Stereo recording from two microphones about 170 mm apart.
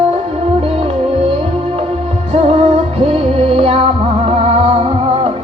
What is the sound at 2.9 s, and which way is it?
Music, 35° right (ahead or behind).